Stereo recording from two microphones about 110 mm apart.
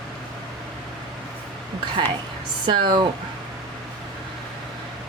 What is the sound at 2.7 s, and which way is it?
Speech, 45° right (ahead or behind).